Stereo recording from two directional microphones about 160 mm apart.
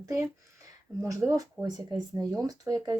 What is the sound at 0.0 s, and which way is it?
Speech, 20° right (ahead or behind).